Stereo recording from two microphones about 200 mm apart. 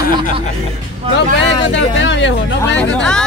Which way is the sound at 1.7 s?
65° left (ahead or behind).